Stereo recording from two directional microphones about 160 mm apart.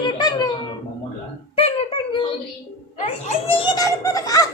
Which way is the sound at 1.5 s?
35° left (ahead or behind).